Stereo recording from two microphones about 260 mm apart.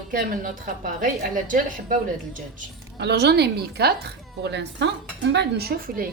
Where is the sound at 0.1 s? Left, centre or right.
Right.